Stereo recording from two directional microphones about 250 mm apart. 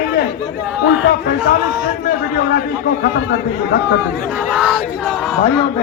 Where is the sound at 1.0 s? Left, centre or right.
Left.